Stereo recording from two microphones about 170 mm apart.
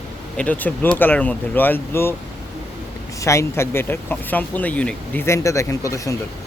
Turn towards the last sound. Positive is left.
turn(degrees=20)  # may be behind; listen again after turning